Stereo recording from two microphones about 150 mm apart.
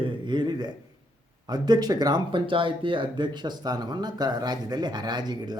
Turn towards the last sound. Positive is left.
turn(degrees=-25)  # may be behind; listen again after turning